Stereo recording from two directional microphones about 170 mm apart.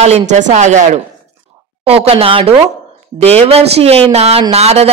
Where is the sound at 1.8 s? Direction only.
35° right (ahead or behind).